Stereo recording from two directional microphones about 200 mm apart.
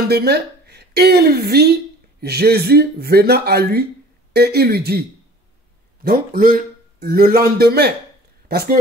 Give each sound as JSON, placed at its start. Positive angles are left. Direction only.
{"t": 0.1, "sound": "a woman's voice", "side_deg": -55}
{"t": 6.0, "sound": "a man's voice", "side_deg": -45}